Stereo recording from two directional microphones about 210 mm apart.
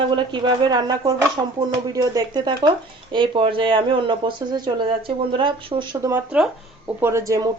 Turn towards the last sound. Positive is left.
turn(degrees=-15)  # may be behind; listen again after turning